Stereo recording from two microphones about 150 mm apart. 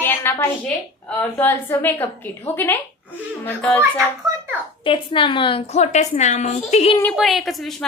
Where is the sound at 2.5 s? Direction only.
40° left (ahead or behind).